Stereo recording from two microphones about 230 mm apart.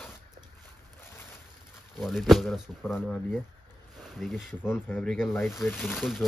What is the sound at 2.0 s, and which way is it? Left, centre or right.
Speech, centre.